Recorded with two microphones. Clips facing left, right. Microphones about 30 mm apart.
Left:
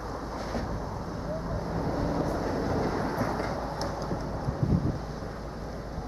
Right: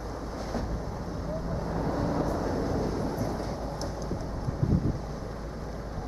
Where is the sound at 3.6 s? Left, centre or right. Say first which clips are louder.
Left 2 dB; left.